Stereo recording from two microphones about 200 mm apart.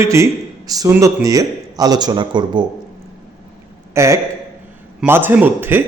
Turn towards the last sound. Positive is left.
turn(degrees=-10)  # may be behind; listen again after turning